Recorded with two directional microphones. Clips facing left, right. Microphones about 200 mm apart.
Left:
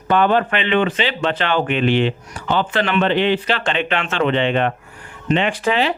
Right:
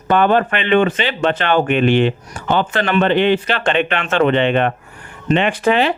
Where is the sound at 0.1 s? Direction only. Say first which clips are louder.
Right 2 dB; 50° right (ahead or behind).